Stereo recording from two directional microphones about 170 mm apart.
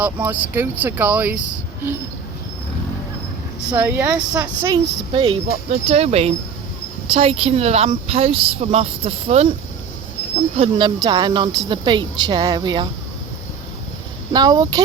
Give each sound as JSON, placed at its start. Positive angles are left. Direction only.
{"t": 0.0, "sound": "speech", "side_deg": -10}
{"t": 3.8, "sound": "speech", "side_deg": -10}
{"t": 5.1, "sound": "speech", "side_deg": -30}
{"t": 10.6, "sound": "a woman's voice", "side_deg": -25}
{"t": 14.3, "sound": "a woman's voice", "side_deg": -20}